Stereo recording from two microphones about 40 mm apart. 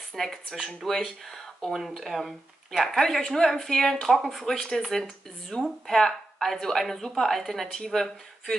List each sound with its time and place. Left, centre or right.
0.1 s a woman's voice: centre
1.7 s speech: centre
2.7 s a woman's voice: centre